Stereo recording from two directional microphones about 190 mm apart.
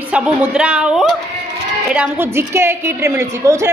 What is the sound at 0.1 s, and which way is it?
A woman's voice, 5° right (ahead or behind).